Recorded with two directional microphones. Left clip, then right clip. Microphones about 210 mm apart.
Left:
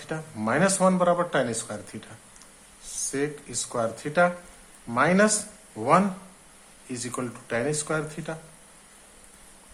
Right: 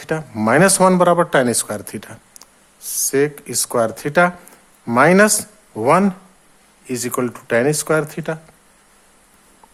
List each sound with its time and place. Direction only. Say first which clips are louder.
0.0 s speech: right 11 dB; 50° right (ahead or behind)